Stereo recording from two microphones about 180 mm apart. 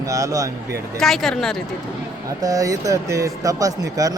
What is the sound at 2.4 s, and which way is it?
Speech, 20° right (ahead or behind).